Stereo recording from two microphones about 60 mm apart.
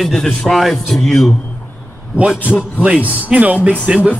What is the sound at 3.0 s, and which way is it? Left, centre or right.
Speech, left.